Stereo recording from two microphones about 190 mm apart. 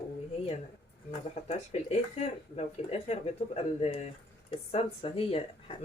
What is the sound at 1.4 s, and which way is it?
Speech, 35° left (ahead or behind).